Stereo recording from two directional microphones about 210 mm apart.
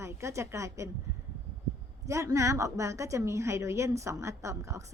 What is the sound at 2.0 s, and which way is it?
Speech, 15° right (ahead or behind).